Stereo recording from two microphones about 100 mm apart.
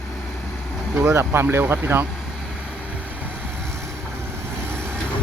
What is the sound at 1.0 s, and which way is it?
Speech, 20° right (ahead or behind).